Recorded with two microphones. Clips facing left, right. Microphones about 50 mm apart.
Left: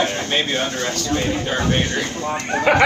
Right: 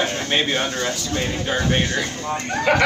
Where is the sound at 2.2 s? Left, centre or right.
Centre.